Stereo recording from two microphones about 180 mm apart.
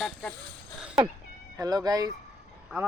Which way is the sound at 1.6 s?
20° right (ahead or behind).